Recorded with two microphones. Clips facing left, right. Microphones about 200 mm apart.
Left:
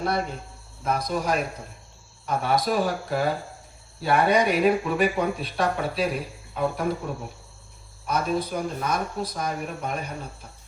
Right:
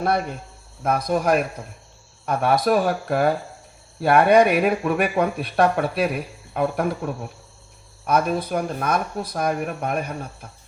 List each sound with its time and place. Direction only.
0.8 s speech: 55° right (ahead or behind)
6.5 s cricket: 60° right (ahead or behind)
7.0 s speech: 65° right (ahead or behind)